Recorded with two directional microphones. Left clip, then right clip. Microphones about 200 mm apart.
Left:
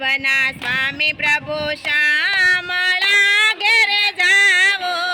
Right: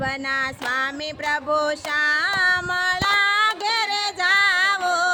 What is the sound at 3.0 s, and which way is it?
Child singing, 40° right (ahead or behind).